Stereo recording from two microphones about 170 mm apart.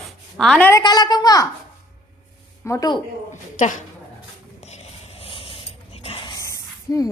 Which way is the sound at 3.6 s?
50° left (ahead or behind).